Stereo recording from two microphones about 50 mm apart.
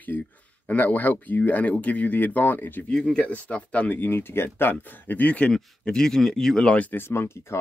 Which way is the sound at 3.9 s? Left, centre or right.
Left.